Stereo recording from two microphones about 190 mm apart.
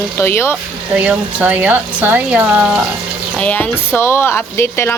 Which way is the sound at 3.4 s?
10° left (ahead or behind).